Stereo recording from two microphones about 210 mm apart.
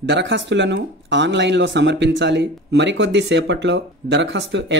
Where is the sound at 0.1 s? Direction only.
55° right (ahead or behind).